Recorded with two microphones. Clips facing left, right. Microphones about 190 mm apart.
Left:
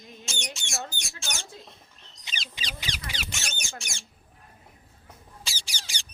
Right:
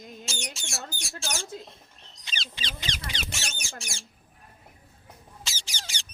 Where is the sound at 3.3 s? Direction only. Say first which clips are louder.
Even; 30° right (ahead or behind).